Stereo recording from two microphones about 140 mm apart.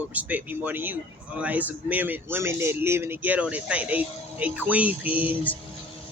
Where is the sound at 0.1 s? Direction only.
10° right (ahead or behind).